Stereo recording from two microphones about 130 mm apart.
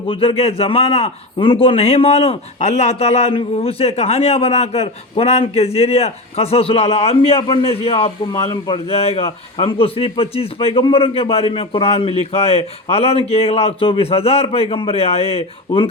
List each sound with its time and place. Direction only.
0.1 s a man's voice: 45° left (ahead or behind)